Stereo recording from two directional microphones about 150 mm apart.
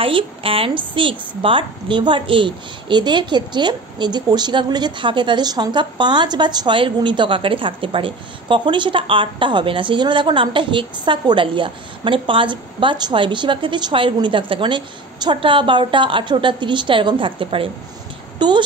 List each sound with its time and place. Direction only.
0.0 s a woman's voice: 40° right (ahead or behind)